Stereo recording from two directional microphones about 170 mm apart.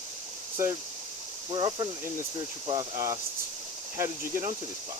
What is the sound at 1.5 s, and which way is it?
Speech, 30° right (ahead or behind).